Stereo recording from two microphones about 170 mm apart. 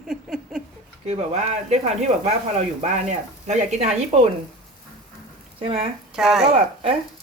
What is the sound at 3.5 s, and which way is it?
Speech, 40° right (ahead or behind).